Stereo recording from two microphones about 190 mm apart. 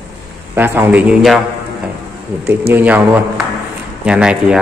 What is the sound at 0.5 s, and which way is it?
Speech, 10° right (ahead or behind).